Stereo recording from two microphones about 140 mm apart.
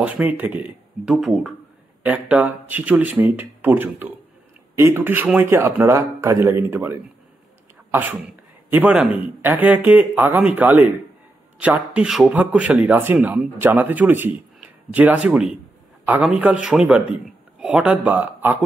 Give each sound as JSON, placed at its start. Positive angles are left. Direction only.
{"t": 0.0, "sound": "speech", "side_deg": -10}